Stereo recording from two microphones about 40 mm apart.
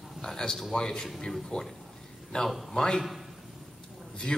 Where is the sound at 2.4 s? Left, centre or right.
Centre.